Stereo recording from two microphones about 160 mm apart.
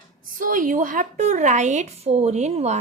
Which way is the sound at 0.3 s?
55° right (ahead or behind).